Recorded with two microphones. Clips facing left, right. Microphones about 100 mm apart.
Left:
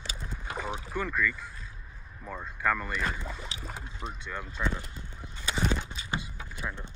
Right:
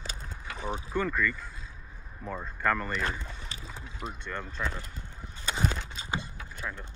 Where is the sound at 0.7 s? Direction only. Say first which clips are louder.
Right 5 dB; 5° left (ahead or behind).